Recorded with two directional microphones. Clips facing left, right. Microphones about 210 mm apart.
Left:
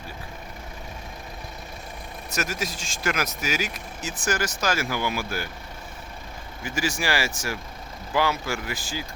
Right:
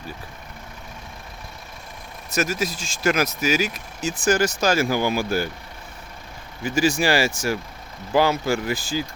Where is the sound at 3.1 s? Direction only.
30° right (ahead or behind).